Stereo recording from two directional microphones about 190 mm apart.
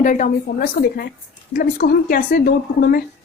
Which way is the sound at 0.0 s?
45° left (ahead or behind).